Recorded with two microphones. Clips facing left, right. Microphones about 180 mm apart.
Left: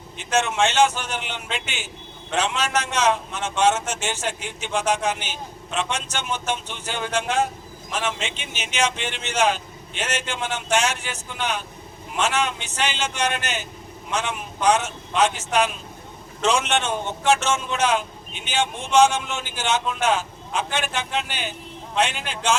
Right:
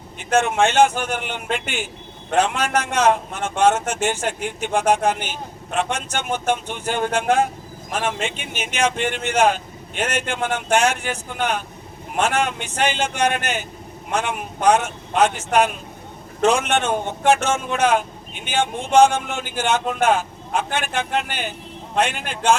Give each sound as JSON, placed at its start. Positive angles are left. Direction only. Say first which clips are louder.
{"t": 0.2, "sound": "a man's voice", "louder": "right 4 dB", "side_deg": -55}